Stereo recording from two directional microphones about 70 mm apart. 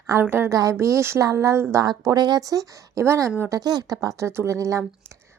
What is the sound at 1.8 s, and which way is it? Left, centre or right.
Speech, right.